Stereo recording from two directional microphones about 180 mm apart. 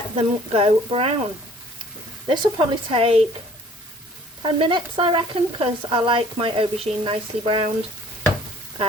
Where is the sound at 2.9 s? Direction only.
30° right (ahead or behind).